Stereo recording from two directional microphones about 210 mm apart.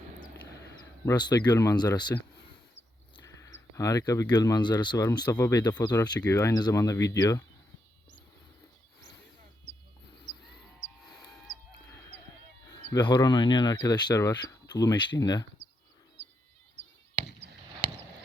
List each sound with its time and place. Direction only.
1.0 s speech: 20° left (ahead or behind)
3.2 s speech: 15° left (ahead or behind)
12.7 s speech: 20° left (ahead or behind)